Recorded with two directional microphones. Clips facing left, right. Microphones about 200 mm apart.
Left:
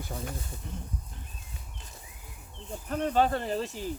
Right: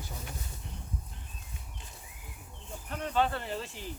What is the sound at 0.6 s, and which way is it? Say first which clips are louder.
Speech: left 6 dB; 45° left (ahead or behind).